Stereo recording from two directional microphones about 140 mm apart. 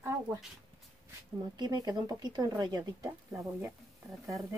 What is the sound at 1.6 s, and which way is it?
Speech, 30° right (ahead or behind).